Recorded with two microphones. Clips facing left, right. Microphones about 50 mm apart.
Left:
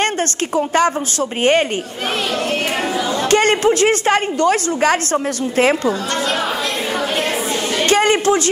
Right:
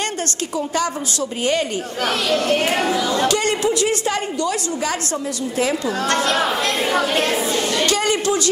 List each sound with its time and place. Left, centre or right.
0.6 s a woman's voice: left
3.3 s a woman's voice: left
7.2 s speech: centre
7.8 s a woman's voice: left